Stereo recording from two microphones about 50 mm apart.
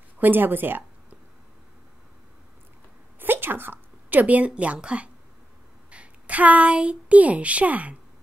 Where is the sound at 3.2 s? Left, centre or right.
Right.